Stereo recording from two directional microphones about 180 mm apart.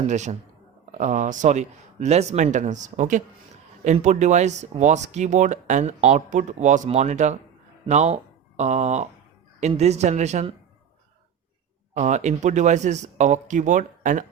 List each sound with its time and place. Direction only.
0.1 s speech: 40° right (ahead or behind)
11.9 s speech: 40° right (ahead or behind)